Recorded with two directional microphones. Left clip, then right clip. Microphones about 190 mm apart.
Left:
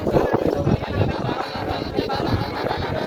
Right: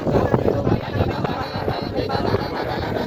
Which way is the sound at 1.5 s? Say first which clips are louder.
Right 1 dB; 15° left (ahead or behind).